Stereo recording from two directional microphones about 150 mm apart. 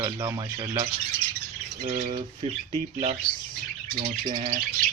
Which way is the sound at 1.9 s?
50° right (ahead or behind).